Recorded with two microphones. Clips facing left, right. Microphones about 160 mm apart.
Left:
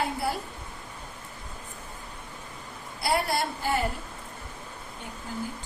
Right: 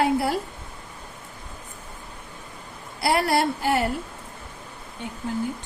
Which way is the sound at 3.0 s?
75° right (ahead or behind).